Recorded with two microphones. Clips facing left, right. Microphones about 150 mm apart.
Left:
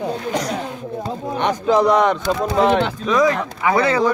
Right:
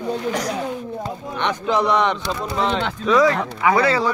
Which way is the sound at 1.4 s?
40° left (ahead or behind).